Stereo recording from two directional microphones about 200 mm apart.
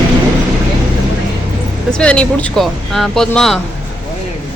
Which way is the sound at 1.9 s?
5° left (ahead or behind).